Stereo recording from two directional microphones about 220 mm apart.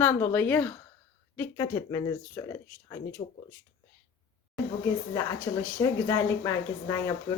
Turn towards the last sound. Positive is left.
turn(degrees=15)  # may be behind; listen again after turning